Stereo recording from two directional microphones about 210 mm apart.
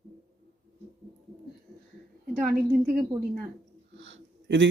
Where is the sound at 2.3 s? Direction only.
45° right (ahead or behind).